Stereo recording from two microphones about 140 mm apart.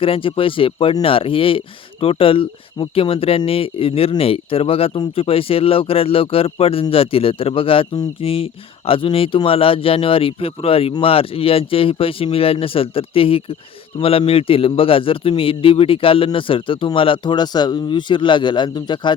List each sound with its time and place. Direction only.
0.0 s a man's voice: 40° left (ahead or behind)